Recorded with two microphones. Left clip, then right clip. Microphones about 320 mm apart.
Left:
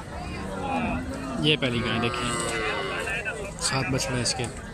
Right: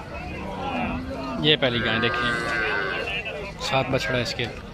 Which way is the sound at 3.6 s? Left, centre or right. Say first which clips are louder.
Right 4 dB; centre.